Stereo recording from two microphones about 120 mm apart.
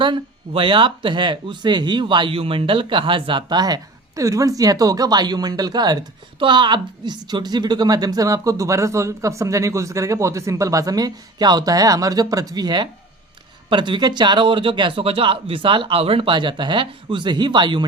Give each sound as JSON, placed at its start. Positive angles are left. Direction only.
{"t": 0.0, "sound": "a woman's voice", "side_deg": -45}